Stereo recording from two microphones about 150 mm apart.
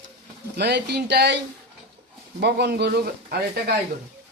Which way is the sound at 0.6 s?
90° right.